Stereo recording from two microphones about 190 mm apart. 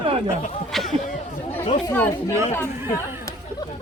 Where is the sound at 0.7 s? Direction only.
Centre (ahead or behind).